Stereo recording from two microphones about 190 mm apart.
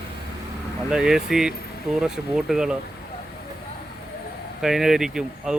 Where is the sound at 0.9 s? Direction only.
5° right (ahead or behind).